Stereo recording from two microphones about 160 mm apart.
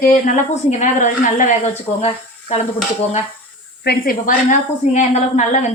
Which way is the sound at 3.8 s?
70° left (ahead or behind).